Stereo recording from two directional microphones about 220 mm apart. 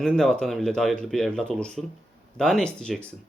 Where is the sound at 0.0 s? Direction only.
5° left (ahead or behind).